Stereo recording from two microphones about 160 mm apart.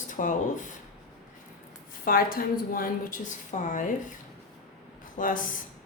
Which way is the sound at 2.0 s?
65° left (ahead or behind).